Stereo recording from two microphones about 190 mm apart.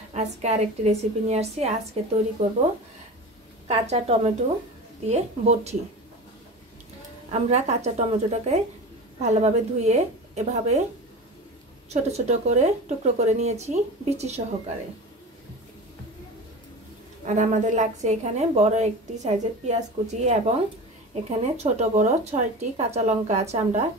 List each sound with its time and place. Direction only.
0.1 s a woman's voice: 35° right (ahead or behind)
3.6 s a woman's voice: 35° right (ahead or behind)
7.2 s a woman's voice: 35° right (ahead or behind)
11.9 s a woman's voice: 35° right (ahead or behind)
17.2 s a woman's voice: 40° right (ahead or behind)